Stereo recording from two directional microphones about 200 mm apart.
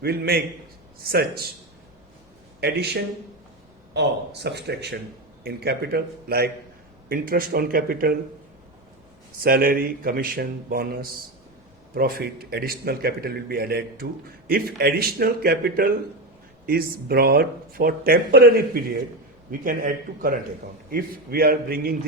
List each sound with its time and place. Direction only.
0.0 s speech: 50° right (ahead or behind)
2.6 s speech: 55° right (ahead or behind)
9.4 s speech: 50° right (ahead or behind)